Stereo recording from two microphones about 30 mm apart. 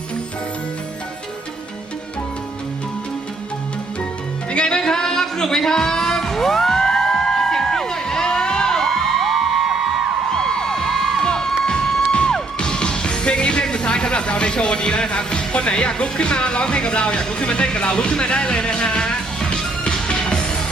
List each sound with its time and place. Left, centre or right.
4.5 s music: left
4.8 s music: left; by 9.4 s centre
9.6 s music: centre
10.3 s a sound: left
11.6 s cheering: left
12.5 s music: left
16.0 s speech: left
20.3 s music: left